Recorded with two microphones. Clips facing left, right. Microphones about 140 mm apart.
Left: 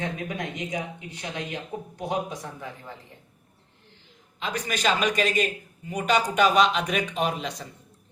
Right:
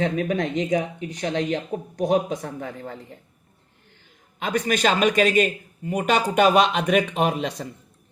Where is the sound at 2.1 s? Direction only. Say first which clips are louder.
Right 7 dB; 70° right (ahead or behind).